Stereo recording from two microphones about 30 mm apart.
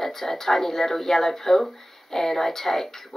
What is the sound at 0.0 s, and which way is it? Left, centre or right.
Speech, centre.